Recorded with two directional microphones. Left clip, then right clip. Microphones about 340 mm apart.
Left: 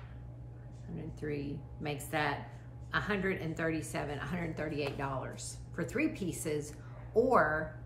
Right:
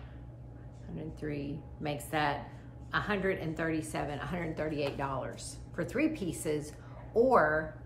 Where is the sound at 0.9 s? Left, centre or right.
Centre.